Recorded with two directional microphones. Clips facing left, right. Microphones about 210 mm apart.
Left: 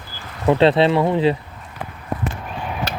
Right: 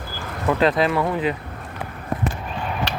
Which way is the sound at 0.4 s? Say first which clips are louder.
Left 4 dB; 25° left (ahead or behind).